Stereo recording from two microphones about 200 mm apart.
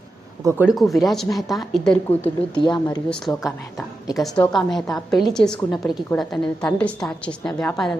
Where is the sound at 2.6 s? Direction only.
20° left (ahead or behind).